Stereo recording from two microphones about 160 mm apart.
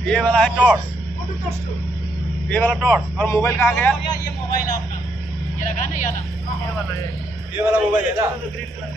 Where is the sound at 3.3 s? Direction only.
15° left (ahead or behind).